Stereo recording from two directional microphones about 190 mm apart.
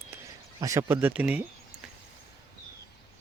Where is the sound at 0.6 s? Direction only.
15° right (ahead or behind).